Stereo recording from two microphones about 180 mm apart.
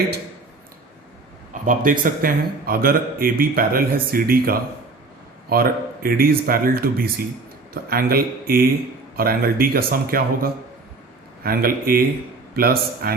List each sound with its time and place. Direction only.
1.6 s speech: 50° right (ahead or behind)